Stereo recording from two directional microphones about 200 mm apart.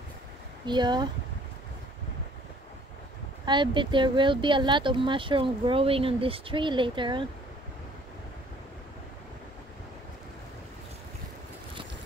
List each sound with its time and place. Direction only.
0.7 s speech: 20° right (ahead or behind)
3.4 s speech: 25° right (ahead or behind)